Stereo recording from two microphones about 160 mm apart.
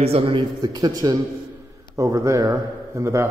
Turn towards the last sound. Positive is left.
turn(degrees=-20)  # may be behind; listen again after turning